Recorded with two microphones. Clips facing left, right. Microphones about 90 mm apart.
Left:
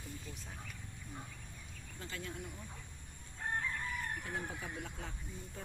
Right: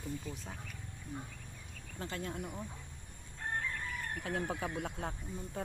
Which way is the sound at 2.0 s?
40° right (ahead or behind).